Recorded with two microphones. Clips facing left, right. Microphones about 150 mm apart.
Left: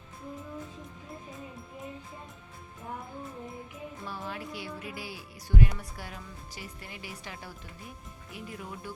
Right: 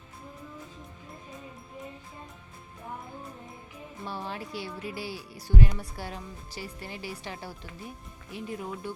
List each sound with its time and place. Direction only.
4.0 s speech: 30° right (ahead or behind)